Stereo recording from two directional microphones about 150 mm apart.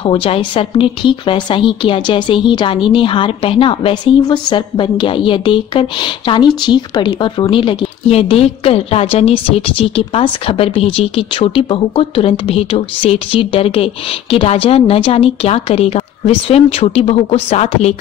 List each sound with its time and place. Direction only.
0.0 s speech: 40° left (ahead or behind)